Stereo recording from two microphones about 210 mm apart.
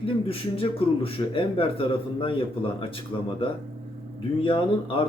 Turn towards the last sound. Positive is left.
turn(degrees=25)  # may be behind; listen again after turning